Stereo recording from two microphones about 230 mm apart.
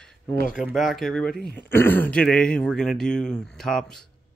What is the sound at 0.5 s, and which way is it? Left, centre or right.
A man's voice, centre.